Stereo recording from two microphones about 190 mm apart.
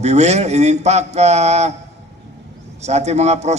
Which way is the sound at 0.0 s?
35° right (ahead or behind).